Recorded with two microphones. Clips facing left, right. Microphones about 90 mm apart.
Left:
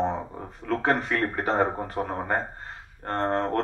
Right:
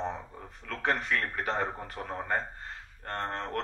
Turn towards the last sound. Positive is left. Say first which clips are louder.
# left 9 dB
turn(degrees=35)  # may be behind; listen again after turning